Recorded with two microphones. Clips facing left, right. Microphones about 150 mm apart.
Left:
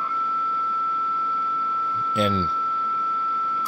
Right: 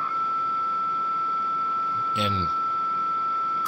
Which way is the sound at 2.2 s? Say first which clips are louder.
Left 7 dB; 45° left (ahead or behind).